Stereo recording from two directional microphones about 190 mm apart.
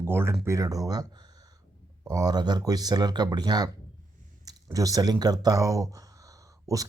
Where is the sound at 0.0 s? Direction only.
10° right (ahead or behind).